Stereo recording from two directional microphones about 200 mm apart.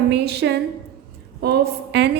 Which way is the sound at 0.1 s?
55° right (ahead or behind).